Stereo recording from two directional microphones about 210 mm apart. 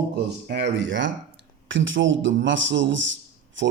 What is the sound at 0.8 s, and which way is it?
A man's voice, 60° right (ahead or behind).